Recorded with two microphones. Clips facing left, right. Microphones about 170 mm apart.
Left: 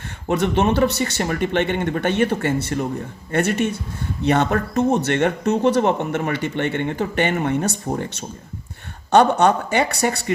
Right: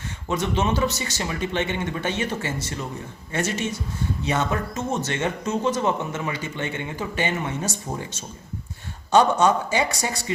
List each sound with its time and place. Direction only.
0.3 s speech: 60° left (ahead or behind)